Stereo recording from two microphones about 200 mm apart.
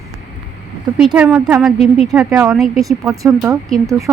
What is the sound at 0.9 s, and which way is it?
A woman's voice, 5° right (ahead or behind).